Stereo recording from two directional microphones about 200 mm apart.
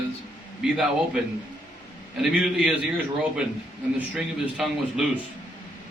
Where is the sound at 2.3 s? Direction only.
5° right (ahead or behind).